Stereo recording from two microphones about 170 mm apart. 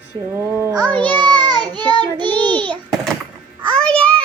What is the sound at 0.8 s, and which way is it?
Speech, 10° left (ahead or behind).